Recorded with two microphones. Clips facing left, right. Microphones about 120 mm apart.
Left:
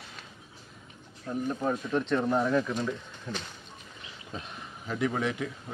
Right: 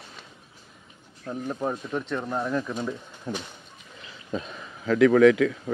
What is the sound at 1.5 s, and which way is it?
Speech, 15° right (ahead or behind).